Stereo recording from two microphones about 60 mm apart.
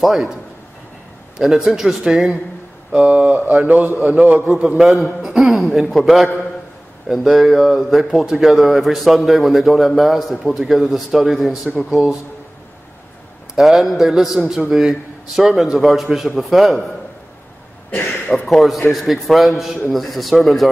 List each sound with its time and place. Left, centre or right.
0.0 s speech: centre
1.4 s speech: centre
2.9 s speech: right
4.3 s a man's voice: centre
13.6 s speech: centre
18.3 s speech: centre